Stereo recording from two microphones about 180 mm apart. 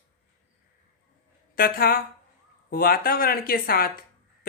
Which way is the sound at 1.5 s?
55° left (ahead or behind).